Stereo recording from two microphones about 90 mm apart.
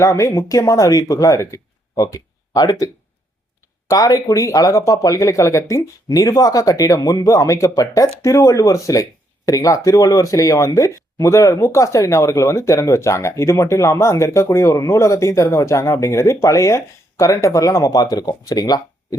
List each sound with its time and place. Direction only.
0.0 s speech: 35° left (ahead or behind)